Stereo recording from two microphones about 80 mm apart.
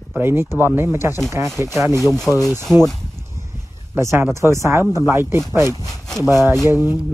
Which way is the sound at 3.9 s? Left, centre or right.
Right.